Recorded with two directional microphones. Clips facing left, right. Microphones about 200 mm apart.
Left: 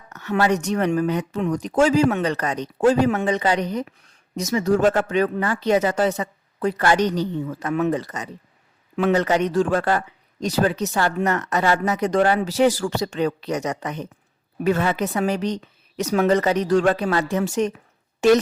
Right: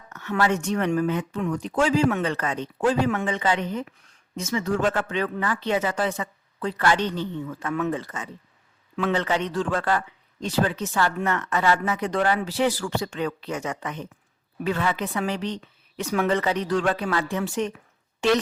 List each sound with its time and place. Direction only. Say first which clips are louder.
0.1 s a woman's voice: left 3 dB; 35° left (ahead or behind)